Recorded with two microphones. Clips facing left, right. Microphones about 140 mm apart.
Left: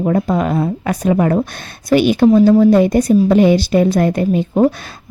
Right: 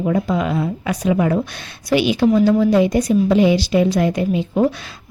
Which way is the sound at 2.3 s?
35° left (ahead or behind).